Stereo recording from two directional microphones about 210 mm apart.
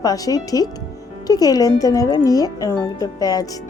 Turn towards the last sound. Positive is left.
turn(degrees=20)  # may be behind; listen again after turning